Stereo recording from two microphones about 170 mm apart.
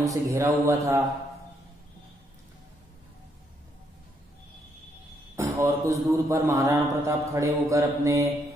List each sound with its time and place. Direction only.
0.0 s a man's voice: 20° right (ahead or behind)
5.3 s music: 15° right (ahead or behind)
6.2 s a man's voice: 15° right (ahead or behind)